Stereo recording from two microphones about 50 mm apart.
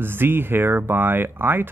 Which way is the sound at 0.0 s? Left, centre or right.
Right.